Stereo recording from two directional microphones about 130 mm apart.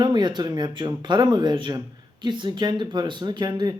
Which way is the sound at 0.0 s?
35° right (ahead or behind).